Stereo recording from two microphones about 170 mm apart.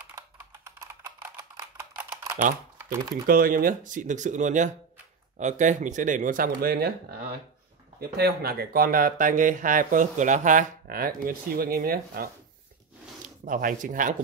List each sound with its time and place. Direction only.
0.0 s typing: 15° right (ahead or behind)
2.8 s speech: 15° right (ahead or behind)
3.3 s speech: 60° right (ahead or behind)
8.2 s speech: 65° right (ahead or behind); by 14.1 s 50° right (ahead or behind)